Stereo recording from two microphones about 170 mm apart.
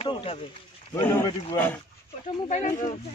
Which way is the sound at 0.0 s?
35° left (ahead or behind).